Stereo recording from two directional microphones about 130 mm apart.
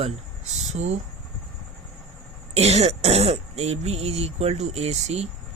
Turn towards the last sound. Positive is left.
turn(degrees=-55)  # may be behind; listen again after turning